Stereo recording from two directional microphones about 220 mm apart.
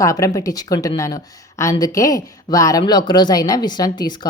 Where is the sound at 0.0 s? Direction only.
15° left (ahead or behind).